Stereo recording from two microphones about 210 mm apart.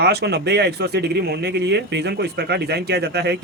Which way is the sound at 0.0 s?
50° right (ahead or behind).